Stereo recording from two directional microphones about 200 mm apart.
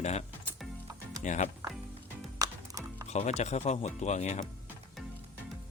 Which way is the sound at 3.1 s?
35° left (ahead or behind).